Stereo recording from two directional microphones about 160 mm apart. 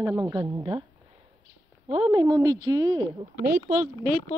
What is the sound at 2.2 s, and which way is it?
Speech, 25° right (ahead or behind).